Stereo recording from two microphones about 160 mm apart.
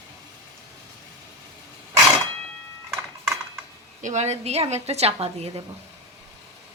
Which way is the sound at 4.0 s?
45° right (ahead or behind).